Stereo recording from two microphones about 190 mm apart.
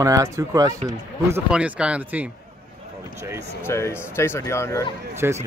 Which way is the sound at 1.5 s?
5° right (ahead or behind).